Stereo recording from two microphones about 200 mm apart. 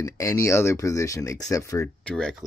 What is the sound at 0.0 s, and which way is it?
Speech, 15° left (ahead or behind).